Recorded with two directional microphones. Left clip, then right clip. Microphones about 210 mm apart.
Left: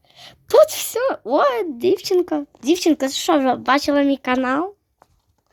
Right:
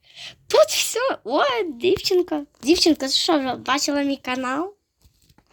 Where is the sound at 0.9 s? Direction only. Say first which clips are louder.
Left 5 dB; 15° left (ahead or behind).